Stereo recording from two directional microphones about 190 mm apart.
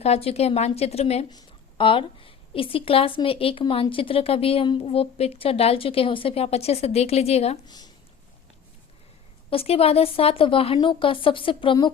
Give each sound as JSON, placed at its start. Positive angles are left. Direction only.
{"t": 0.0, "sound": "a woman's voice", "side_deg": 35}
{"t": 7.7, "sound": "speech", "side_deg": 20}
{"t": 9.5, "sound": "a woman's voice", "side_deg": 30}